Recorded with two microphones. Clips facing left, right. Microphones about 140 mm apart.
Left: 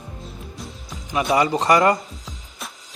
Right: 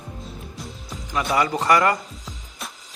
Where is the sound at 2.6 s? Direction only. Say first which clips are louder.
Even; centre (ahead or behind).